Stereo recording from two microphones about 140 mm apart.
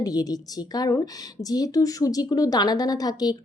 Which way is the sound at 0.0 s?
25° left (ahead or behind).